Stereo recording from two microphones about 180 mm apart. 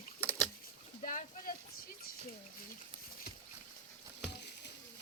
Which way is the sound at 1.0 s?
50° left (ahead or behind).